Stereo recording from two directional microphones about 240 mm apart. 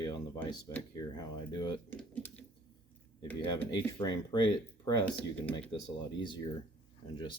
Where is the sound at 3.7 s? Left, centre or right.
Centre.